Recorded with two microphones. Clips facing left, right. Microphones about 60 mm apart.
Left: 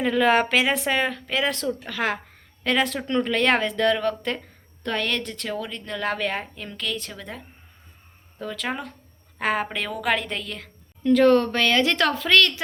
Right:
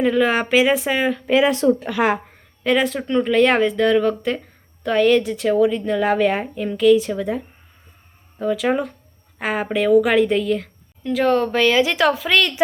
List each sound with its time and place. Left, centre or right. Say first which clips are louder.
0.0 s a woman's voice: right 2 dB; centre
1.6 s speech: right 11 dB; right
1.9 s a sound: right 7 dB; centre
2.7 s a woman's voice: right 4 dB; centre